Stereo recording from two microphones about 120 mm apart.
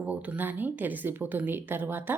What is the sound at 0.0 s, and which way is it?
A woman's voice, 10° right (ahead or behind).